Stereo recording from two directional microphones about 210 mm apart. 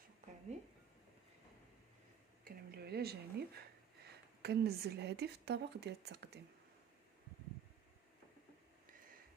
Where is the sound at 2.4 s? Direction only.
45° right (ahead or behind).